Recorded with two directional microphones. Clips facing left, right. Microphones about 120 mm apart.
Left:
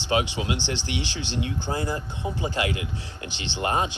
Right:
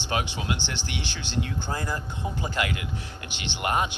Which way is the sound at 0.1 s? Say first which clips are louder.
Left 4 dB; 25° left (ahead or behind).